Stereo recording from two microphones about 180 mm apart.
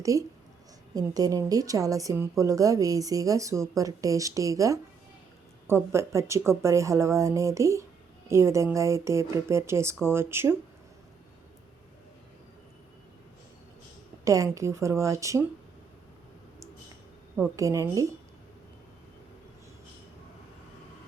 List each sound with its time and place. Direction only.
0.0 s a woman's voice: 20° right (ahead or behind)
14.3 s speech: 20° right (ahead or behind)
17.6 s speech: 15° right (ahead or behind)